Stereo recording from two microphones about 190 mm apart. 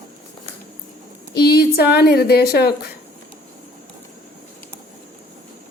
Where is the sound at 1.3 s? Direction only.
55° left (ahead or behind).